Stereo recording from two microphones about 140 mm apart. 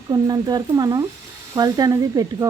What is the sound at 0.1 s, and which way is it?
Speech, 30° right (ahead or behind).